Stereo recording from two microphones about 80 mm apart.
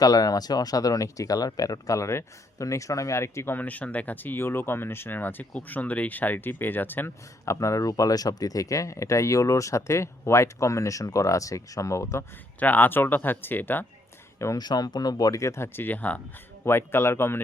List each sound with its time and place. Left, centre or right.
0.0 s speech: left
7.4 s speech: left
12.5 s speech: left
14.3 s speech: left
14.6 s speech: left; by 16.2 s centre
16.6 s speech: left